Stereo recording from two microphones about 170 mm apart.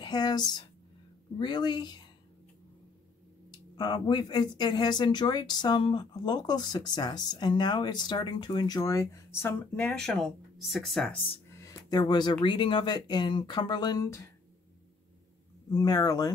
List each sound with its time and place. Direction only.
0.0 s speech: 25° left (ahead or behind)
3.5 s speech: 25° left (ahead or behind); by 11.1 s centre (ahead or behind)
11.6 s speech: 25° left (ahead or behind)
15.7 s speech: 20° left (ahead or behind)